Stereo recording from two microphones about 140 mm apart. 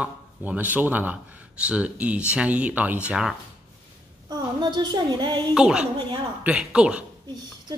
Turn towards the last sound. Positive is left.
turn(degrees=-10)  # may be behind; listen again after turning